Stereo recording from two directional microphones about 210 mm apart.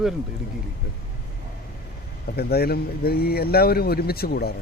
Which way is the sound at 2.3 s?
50° left (ahead or behind).